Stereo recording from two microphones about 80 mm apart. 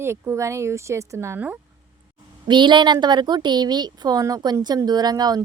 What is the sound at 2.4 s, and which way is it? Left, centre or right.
A woman's voice, right.